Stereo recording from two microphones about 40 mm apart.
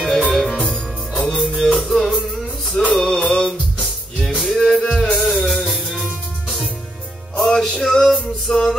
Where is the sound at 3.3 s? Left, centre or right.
Centre.